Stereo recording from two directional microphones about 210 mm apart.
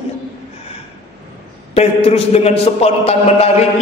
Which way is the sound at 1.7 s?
30° left (ahead or behind).